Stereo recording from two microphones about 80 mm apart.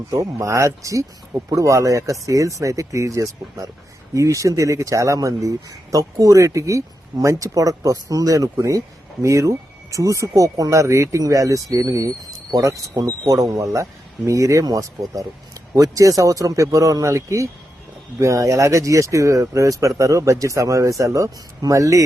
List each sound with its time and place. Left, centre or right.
0.1 s speech: right